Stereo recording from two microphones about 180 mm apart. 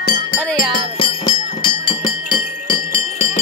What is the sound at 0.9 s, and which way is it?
Music, 25° left (ahead or behind).